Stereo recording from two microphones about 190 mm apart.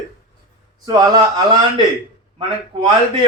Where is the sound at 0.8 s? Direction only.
20° right (ahead or behind).